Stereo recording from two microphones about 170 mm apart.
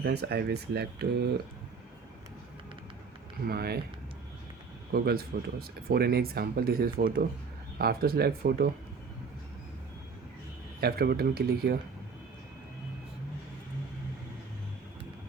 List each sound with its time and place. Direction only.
0.0 s speech: 75° right (ahead or behind)
3.4 s speech: 65° right (ahead or behind)
4.9 s speech: 65° right (ahead or behind)
10.8 s speech: 65° right (ahead or behind)